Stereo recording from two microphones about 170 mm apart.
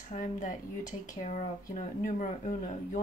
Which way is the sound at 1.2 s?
45° left (ahead or behind).